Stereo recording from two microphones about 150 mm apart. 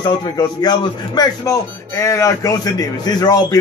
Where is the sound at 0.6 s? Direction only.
25° left (ahead or behind).